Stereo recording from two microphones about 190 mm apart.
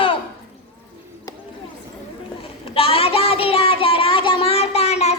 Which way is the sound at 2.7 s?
30° left (ahead or behind).